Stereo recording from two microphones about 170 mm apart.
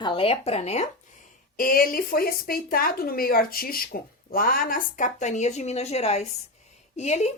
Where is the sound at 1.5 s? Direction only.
60° left (ahead or behind).